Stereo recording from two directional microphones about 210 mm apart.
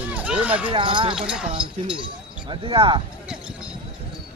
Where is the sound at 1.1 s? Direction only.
5° right (ahead or behind).